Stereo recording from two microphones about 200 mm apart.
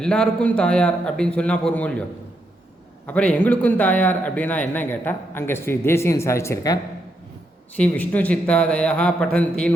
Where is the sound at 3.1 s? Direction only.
5° left (ahead or behind).